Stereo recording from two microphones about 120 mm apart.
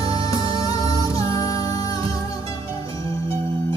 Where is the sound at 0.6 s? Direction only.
30° left (ahead or behind).